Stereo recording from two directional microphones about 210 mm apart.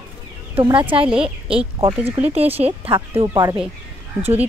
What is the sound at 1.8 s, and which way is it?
Speech, 25° right (ahead or behind).